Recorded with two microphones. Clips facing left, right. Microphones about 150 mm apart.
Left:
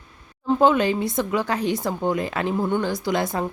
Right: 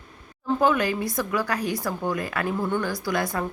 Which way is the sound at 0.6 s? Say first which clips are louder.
Left 4 dB; 25° left (ahead or behind).